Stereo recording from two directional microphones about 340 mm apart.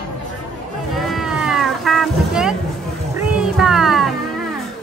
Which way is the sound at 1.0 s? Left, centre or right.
Centre.